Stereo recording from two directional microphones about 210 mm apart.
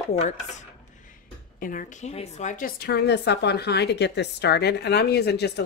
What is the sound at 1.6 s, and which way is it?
A woman's voice, 40° left (ahead or behind).